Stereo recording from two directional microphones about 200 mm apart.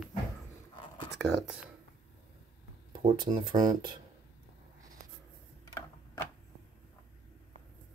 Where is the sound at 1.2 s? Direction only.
Centre (ahead or behind).